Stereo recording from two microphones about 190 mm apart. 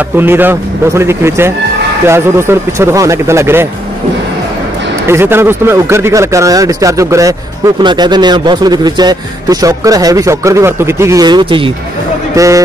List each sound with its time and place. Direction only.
0.2 s speech: 10° right (ahead or behind)
5.0 s speech: 10° right (ahead or behind)